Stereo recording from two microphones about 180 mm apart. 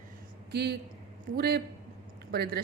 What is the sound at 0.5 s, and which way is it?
A woman's voice, 65° right (ahead or behind).